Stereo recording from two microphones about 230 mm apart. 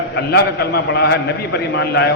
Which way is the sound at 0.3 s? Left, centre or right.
Left.